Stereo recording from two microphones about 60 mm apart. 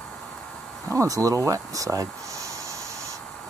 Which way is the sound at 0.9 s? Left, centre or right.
Right.